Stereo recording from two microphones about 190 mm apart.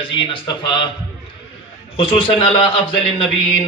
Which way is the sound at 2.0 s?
30° left (ahead or behind).